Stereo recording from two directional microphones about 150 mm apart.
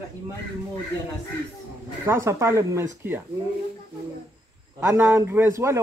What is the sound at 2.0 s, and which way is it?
Speech, 15° right (ahead or behind).